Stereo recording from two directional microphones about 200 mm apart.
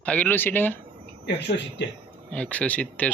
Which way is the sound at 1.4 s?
60° left (ahead or behind).